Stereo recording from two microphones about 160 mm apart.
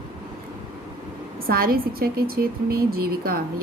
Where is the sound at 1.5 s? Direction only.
70° right (ahead or behind).